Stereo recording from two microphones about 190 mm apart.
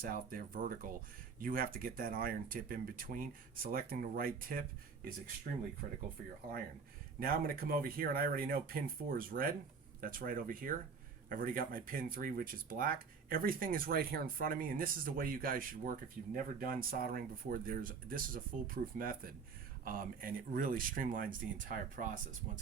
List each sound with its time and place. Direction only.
0.0 s speech: 50° right (ahead or behind)
7.2 s speech: 50° right (ahead or behind)